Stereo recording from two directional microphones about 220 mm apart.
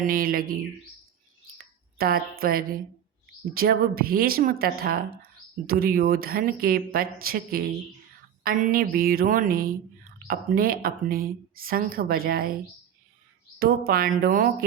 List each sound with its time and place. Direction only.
0.0 s speech: 40° right (ahead or behind)
2.0 s a woman's voice: 45° right (ahead or behind)
13.6 s speech: 40° right (ahead or behind)